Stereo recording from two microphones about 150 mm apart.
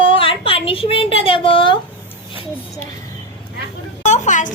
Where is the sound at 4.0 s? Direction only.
55° left (ahead or behind).